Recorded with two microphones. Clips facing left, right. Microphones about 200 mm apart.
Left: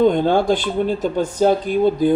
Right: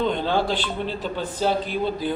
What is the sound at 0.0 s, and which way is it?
Speech, 50° left (ahead or behind).